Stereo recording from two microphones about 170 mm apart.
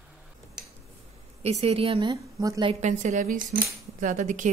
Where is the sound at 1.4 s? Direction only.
35° right (ahead or behind).